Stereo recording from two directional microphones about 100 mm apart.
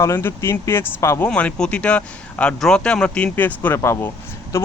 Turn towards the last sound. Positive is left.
turn(degrees=25)  # may be behind; listen again after turning